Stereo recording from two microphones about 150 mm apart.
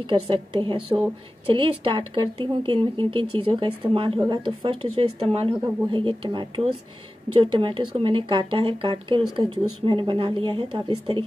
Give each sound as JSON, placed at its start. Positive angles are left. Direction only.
{"t": 0.0, "sound": "a woman's voice", "side_deg": -35}